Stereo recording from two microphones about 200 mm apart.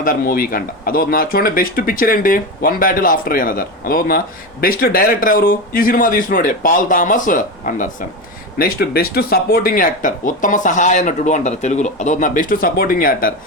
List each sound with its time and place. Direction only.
0.0 s a man's voice: 45° left (ahead or behind)